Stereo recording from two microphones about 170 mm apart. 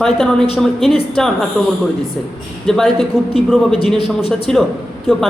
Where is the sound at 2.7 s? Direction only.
Centre (ahead or behind).